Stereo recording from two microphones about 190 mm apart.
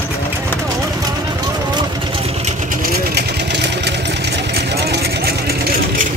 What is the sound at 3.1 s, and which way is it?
Vehicle, 60° right (ahead or behind).